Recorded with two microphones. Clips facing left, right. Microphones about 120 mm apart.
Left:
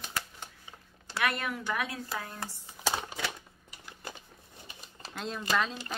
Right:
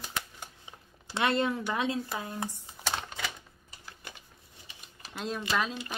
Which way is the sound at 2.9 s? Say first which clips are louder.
Left 2 dB; 5° left (ahead or behind).